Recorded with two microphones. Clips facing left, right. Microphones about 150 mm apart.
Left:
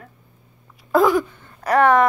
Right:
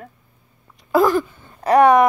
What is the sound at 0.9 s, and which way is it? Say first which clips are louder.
Speech: even; centre (ahead or behind).